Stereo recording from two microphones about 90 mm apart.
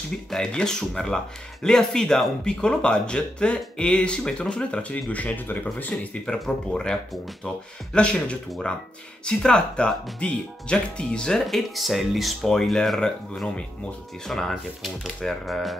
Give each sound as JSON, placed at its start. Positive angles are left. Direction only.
{"t": 0.3, "sound": "speech", "side_deg": 10}